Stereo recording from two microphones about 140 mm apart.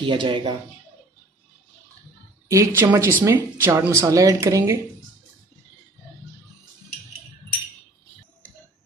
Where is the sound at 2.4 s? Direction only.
20° right (ahead or behind).